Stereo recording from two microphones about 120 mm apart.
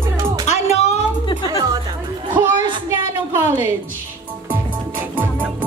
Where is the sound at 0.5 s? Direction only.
70° left (ahead or behind).